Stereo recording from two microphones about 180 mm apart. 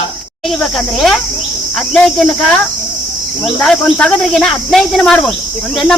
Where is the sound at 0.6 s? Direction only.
Centre (ahead or behind).